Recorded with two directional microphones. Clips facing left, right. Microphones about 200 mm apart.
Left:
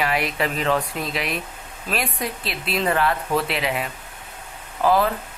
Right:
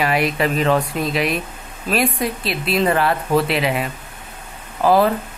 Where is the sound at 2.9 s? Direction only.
35° right (ahead or behind).